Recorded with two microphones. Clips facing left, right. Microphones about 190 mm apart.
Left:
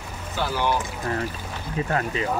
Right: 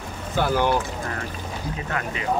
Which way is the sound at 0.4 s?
50° right (ahead or behind).